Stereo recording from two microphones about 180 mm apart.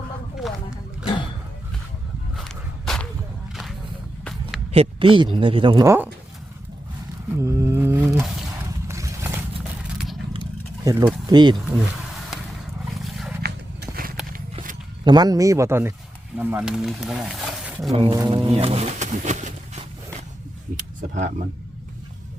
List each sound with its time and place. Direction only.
0.3 s a sound: centre (ahead or behind)
2.3 s walk: centre (ahead or behind)
3.5 s a sound: centre (ahead or behind)
4.7 s speech: 30° right (ahead or behind)
7.3 s a sound: 15° right (ahead or behind)
8.9 s horse: 15° right (ahead or behind)
10.8 s speech: 15° right (ahead or behind)
13.4 s roaring cats: 60° right (ahead or behind)
15.0 s speech: 25° right (ahead or behind); by 17.9 s 5° right (ahead or behind)
17.9 s speech: 25° right (ahead or behind)
18.4 s music: 35° right (ahead or behind)
21.1 s speech: 45° right (ahead or behind)